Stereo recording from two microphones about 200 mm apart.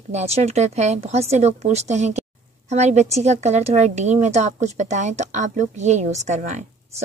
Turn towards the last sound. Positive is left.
turn(degrees=-35)  # may be behind; listen again after turning